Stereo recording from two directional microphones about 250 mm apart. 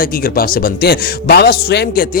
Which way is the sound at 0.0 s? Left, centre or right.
Left.